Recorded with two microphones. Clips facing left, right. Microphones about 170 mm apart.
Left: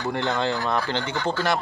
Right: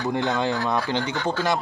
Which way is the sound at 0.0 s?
15° right (ahead or behind).